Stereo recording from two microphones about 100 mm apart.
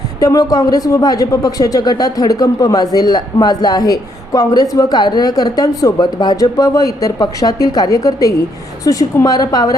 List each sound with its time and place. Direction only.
0.2 s a man's voice: 35° left (ahead or behind)